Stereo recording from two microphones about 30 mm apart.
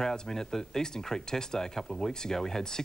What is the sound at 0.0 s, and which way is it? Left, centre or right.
Speech, centre.